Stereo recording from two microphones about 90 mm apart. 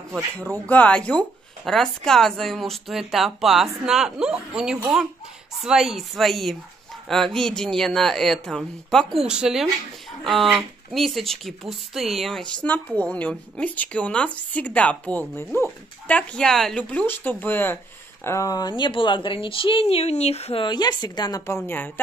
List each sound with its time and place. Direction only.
0.7 s speech: 15° left (ahead or behind)
9.2 s speech: 5° right (ahead or behind)
12.6 s speech: 15° left (ahead or behind)
16.9 s speech: 20° left (ahead or behind)
18.2 s a woman's voice: 35° left (ahead or behind); by 20.0 s 85° left
20.5 s a woman's voice: 55° left (ahead or behind)
21.5 s speech: 25° left (ahead or behind)